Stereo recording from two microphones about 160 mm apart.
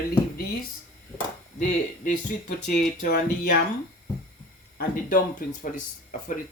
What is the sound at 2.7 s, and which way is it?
Speech, 60° left (ahead or behind).